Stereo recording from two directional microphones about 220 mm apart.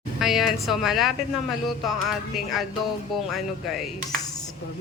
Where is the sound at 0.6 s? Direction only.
Centre (ahead or behind).